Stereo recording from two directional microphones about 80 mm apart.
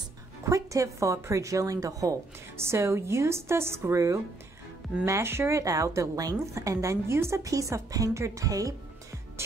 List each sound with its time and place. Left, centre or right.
0.4 s a woman's voice: right
2.5 s a woman's voice: right